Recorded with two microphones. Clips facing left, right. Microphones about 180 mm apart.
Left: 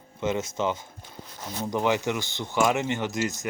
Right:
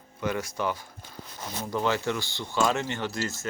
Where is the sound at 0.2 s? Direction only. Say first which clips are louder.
Left 3 dB; 20° left (ahead or behind).